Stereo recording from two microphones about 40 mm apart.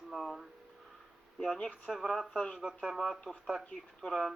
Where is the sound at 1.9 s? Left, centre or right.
Centre.